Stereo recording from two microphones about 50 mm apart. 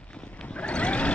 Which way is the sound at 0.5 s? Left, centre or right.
Left.